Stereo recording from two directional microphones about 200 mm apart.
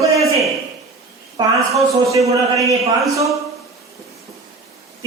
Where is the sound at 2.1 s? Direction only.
15° right (ahead or behind).